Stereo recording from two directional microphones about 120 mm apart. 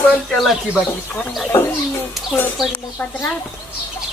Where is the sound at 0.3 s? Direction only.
Centre (ahead or behind).